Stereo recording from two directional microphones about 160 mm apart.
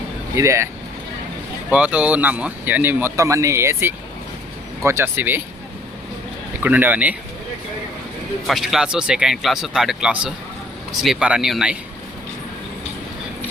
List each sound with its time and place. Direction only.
0.3 s speech: 20° right (ahead or behind)
1.7 s speech: 10° right (ahead or behind)
6.6 s speech: 10° right (ahead or behind)
8.4 s speech: centre (ahead or behind)